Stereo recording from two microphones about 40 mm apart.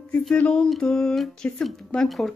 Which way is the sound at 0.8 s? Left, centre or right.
Centre.